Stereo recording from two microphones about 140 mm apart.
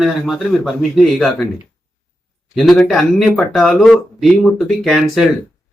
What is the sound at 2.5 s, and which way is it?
Speech, centre (ahead or behind).